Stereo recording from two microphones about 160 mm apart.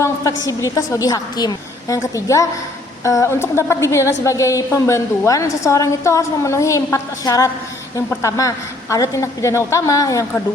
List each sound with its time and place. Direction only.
0.0 s a woman's voice: 20° left (ahead or behind)